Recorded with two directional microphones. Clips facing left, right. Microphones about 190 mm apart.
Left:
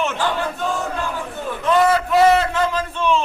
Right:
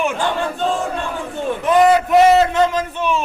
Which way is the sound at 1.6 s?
15° right (ahead or behind).